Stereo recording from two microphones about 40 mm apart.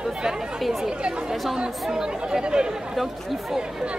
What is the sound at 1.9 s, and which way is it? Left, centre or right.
Speech, centre.